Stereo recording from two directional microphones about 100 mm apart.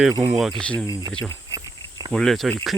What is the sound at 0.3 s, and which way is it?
Speech, 5° right (ahead or behind).